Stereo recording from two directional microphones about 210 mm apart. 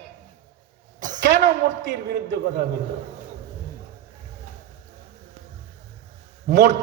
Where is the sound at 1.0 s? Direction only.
40° right (ahead or behind).